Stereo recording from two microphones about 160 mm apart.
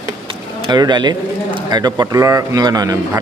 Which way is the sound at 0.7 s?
25° right (ahead or behind).